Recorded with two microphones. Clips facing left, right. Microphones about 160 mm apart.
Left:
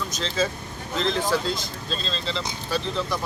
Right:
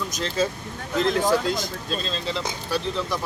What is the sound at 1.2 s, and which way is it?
Speech, 40° right (ahead or behind).